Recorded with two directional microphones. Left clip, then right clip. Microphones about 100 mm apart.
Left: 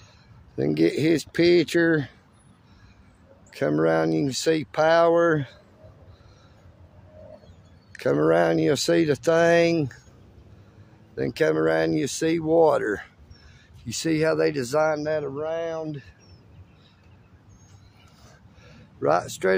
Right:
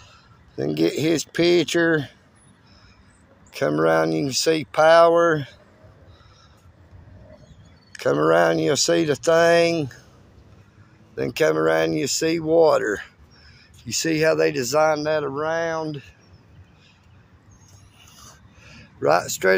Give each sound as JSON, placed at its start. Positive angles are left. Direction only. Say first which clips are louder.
{"t": 0.7, "sound": "speech", "louder": "right 1 dB", "side_deg": 45}
{"t": 3.7, "sound": "speech", "louder": "right 3 dB", "side_deg": 30}
{"t": 7.9, "sound": "speech", "louder": "right 2 dB", "side_deg": 35}
{"t": 9.8, "sound": "speech", "louder": "even", "side_deg": 50}
{"t": 11.1, "sound": "speech", "louder": "right 2 dB", "side_deg": 25}
{"t": 18.6, "sound": "a sound", "louder": "right 6 dB", "side_deg": 45}
{"t": 18.9, "sound": "speech", "louder": "right 3 dB", "side_deg": 15}